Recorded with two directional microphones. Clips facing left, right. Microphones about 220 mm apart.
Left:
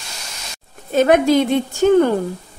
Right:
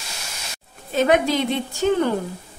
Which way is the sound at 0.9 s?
50° left (ahead or behind).